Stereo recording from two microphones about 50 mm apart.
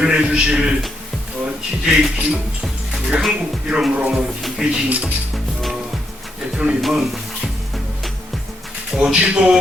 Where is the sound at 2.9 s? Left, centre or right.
Centre.